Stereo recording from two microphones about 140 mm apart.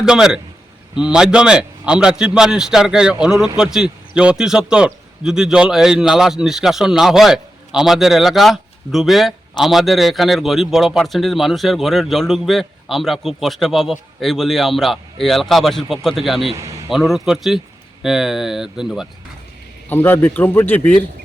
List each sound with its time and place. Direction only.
0.0 s a man's voice: 5° right (ahead or behind)
16.6 s a man's voice: 20° right (ahead or behind)
16.9 s a man's voice: centre (ahead or behind)
19.9 s a man's voice: 15° left (ahead or behind)